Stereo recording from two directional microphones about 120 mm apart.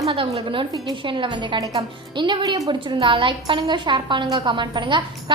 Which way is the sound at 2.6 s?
45° right (ahead or behind).